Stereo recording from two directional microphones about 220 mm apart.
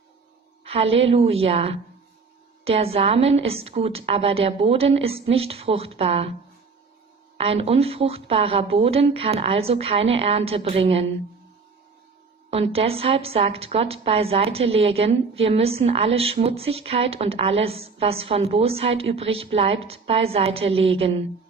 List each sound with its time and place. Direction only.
0.7 s a woman's voice: 25° right (ahead or behind)
7.3 s a woman's voice: 25° right (ahead or behind)
12.5 s a woman's voice: 25° right (ahead or behind)